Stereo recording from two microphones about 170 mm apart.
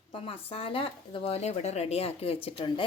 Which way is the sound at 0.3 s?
30° left (ahead or behind).